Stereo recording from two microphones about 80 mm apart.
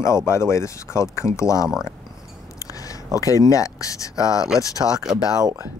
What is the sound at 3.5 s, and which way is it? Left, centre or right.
Speech, left.